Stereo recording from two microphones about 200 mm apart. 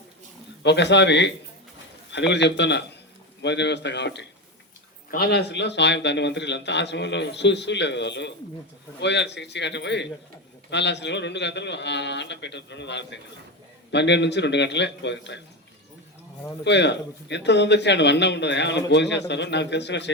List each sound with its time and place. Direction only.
0.6 s a man's voice: 60° left (ahead or behind)
16.6 s a man's voice: 60° left (ahead or behind)